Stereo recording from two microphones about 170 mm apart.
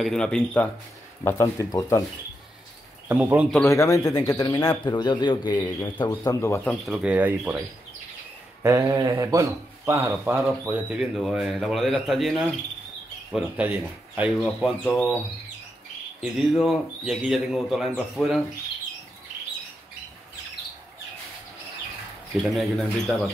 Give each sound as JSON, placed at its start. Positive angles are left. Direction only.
{"t": 0.0, "sound": "speech", "side_deg": 5}
{"t": 1.2, "sound": "speech", "side_deg": 20}
{"t": 3.1, "sound": "a man's voice", "side_deg": -10}
{"t": 3.6, "sound": "speech", "side_deg": 20}
{"t": 6.9, "sound": "a man's voice", "side_deg": -5}
{"t": 8.6, "sound": "a man's voice", "side_deg": -20}
{"t": 16.2, "sound": "speech", "side_deg": 0}
{"t": 22.3, "sound": "speech", "side_deg": 0}